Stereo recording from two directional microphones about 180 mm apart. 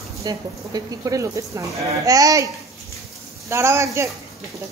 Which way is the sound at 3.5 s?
15° right (ahead or behind).